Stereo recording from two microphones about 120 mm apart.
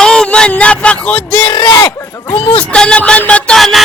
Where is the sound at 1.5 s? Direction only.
35° left (ahead or behind).